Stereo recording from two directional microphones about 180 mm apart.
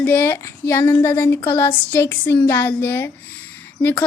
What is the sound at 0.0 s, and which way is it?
A woman's voice, 10° left (ahead or behind).